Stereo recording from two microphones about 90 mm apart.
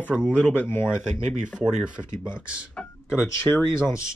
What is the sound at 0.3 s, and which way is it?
Speech, 15° left (ahead or behind).